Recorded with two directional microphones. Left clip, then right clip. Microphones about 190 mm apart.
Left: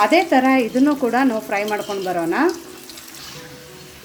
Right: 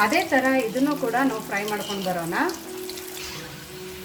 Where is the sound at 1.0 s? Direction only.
35° left (ahead or behind).